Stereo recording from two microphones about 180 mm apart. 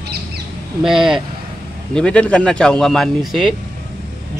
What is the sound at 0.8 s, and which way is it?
Speech, centre (ahead or behind).